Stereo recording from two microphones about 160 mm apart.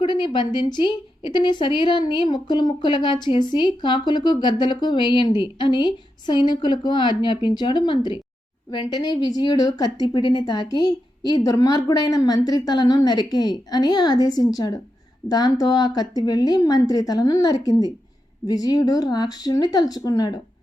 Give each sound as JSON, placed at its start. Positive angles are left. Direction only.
{"t": 0.0, "sound": "a woman's voice", "side_deg": 30}